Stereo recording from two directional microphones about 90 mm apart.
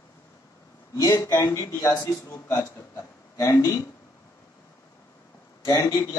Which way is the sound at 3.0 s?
30° left (ahead or behind).